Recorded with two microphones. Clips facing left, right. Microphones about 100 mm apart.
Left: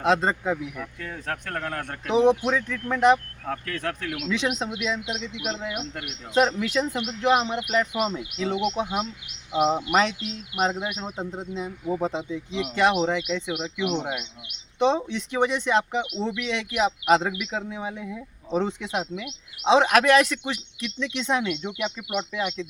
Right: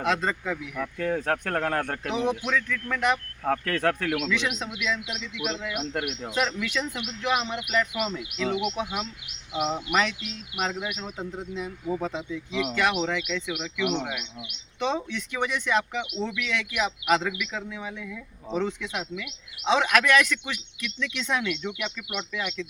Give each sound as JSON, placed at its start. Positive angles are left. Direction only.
{"t": 0.0, "sound": "speech", "side_deg": 30}
{"t": 0.8, "sound": "speech", "side_deg": -55}
{"t": 2.0, "sound": "speech", "side_deg": 30}
{"t": 3.8, "sound": "speech", "side_deg": -55}
{"t": 4.3, "sound": "speech", "side_deg": 30}